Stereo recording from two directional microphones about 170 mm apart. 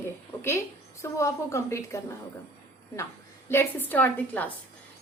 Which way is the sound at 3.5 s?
15° left (ahead or behind).